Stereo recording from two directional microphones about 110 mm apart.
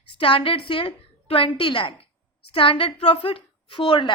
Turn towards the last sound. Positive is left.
turn(degrees=50)  # may be behind; listen again after turning